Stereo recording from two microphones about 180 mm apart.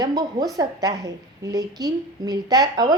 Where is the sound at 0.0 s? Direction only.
25° right (ahead or behind).